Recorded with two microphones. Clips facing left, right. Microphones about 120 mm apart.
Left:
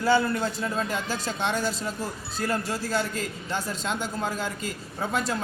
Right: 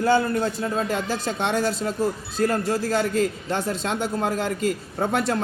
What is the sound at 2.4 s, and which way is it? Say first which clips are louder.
Speech: right 6 dB; 45° right (ahead or behind).